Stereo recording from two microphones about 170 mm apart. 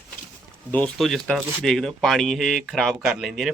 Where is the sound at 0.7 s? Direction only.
5° left (ahead or behind).